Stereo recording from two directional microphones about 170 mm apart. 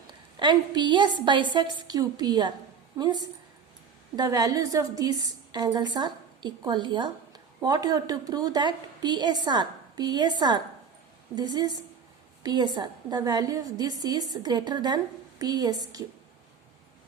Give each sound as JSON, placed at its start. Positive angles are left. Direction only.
{"t": 0.1, "sound": "a woman's voice", "side_deg": -25}